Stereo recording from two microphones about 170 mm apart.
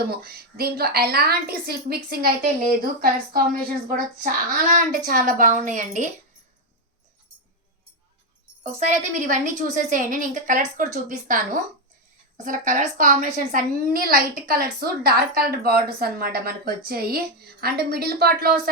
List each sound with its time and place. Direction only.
0.1 s a woman's voice: 65° right (ahead or behind); by 6.1 s 45° right (ahead or behind)
9.1 s a woman's voice: 45° right (ahead or behind); by 18.7 s 65° right (ahead or behind)